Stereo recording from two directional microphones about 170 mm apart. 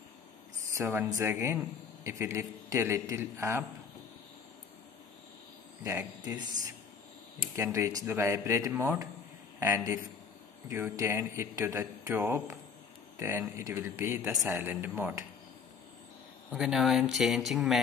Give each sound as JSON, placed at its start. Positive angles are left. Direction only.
{"t": 0.7, "sound": "a man's voice", "side_deg": -15}
{"t": 5.8, "sound": "speech", "side_deg": -20}
{"t": 7.5, "sound": "a man's voice", "side_deg": -15}
{"t": 10.7, "sound": "a man's voice", "side_deg": -15}
{"t": 16.5, "sound": "speech", "side_deg": 0}